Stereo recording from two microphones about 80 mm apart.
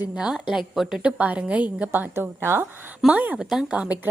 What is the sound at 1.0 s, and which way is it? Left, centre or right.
Speech, centre.